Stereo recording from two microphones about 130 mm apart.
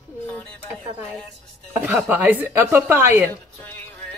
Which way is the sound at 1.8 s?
15° right (ahead or behind).